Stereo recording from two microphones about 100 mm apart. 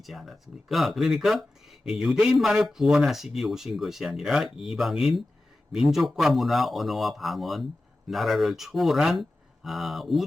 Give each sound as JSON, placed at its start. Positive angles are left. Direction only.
{"t": 0.0, "sound": "speech", "side_deg": 0}